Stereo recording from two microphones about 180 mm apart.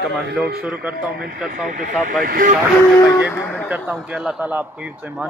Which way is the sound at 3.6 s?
10° right (ahead or behind).